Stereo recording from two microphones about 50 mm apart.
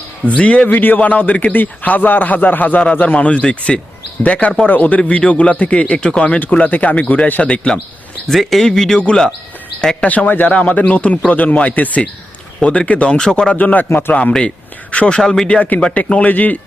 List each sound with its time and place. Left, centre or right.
0.3 s a man's voice: left
8.3 s speech: centre
10.0 s a man's voice: left; by 13.5 s centre
13.5 s a man's voice: left
14.9 s speech: centre
15.4 s a man's voice: left